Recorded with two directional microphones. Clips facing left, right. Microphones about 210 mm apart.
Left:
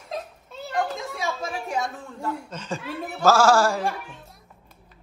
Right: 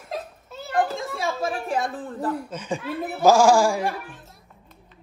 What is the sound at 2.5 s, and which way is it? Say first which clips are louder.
Music: right 3 dB; 10° right (ahead or behind).